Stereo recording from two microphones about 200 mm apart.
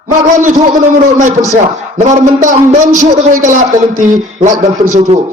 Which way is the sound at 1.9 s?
40° right (ahead or behind).